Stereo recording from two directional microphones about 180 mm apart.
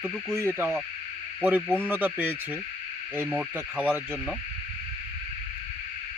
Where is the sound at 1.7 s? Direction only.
10° right (ahead or behind).